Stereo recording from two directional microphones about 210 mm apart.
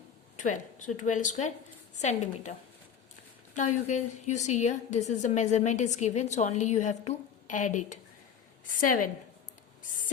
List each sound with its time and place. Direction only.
0.4 s a woman's voice: 35° left (ahead or behind)
3.8 s a woman's voice: 35° left (ahead or behind)